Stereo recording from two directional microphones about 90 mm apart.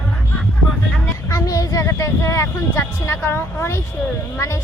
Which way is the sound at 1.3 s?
40° left (ahead or behind).